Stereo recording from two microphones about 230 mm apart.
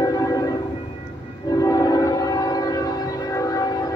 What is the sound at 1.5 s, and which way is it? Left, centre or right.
Train, centre.